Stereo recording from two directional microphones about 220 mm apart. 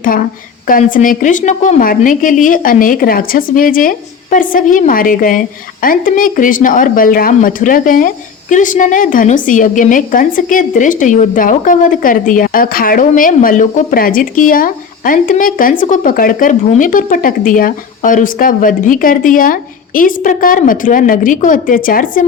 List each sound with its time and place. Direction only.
0.0 s a woman's voice: 40° left (ahead or behind)